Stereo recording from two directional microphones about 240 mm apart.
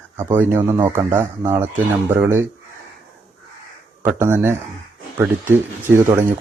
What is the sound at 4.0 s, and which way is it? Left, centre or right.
Speech, centre.